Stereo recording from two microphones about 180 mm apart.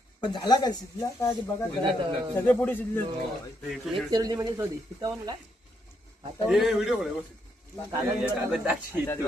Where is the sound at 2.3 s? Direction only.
10° left (ahead or behind).